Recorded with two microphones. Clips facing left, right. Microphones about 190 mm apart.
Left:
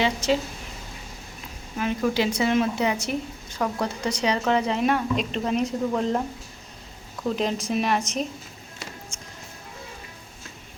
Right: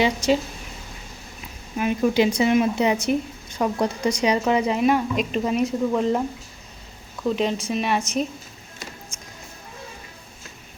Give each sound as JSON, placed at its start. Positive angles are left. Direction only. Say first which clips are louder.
{"t": 0.0, "sound": "speech", "louder": "right 3 dB", "side_deg": -15}
{"t": 1.8, "sound": "speech", "louder": "right 4 dB", "side_deg": -15}
{"t": 7.3, "sound": "speech", "louder": "right 2 dB", "side_deg": 0}